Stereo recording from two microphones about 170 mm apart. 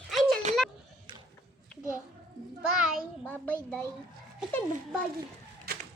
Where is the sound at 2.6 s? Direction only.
5° right (ahead or behind).